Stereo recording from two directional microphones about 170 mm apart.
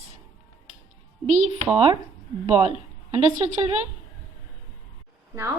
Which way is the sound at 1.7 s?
30° right (ahead or behind).